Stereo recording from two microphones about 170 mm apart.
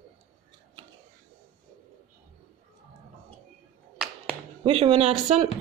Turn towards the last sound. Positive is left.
turn(degrees=-40)  # may be behind; listen again after turning